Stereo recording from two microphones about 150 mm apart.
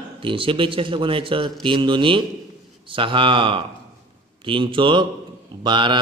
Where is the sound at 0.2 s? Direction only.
35° right (ahead or behind).